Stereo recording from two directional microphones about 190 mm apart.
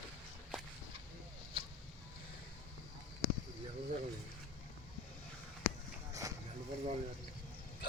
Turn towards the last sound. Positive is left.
turn(degrees=-15)  # may be behind; listen again after turning